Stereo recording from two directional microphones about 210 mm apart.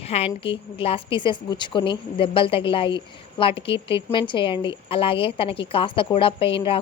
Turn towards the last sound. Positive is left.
turn(degrees=25)  # may be behind; listen again after turning